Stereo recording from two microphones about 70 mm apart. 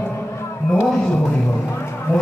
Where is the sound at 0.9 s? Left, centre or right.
Centre.